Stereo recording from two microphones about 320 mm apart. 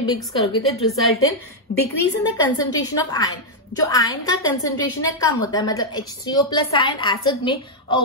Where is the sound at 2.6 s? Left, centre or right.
Centre.